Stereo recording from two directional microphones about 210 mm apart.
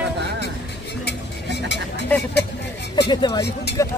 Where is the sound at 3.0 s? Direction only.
20° left (ahead or behind).